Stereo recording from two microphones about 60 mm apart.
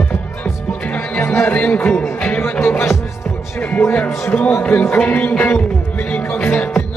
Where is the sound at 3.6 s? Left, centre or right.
Left.